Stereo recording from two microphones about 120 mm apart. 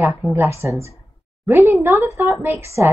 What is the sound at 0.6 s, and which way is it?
Speech, 25° right (ahead or behind).